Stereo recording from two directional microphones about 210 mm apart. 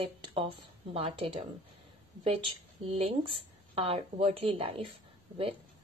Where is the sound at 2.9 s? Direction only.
25° right (ahead or behind).